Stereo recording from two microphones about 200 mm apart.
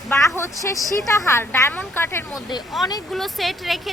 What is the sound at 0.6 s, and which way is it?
A woman's voice, 15° left (ahead or behind).